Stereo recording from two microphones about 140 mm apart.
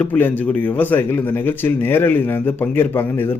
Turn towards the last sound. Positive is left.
turn(degrees=15)  # may be behind; listen again after turning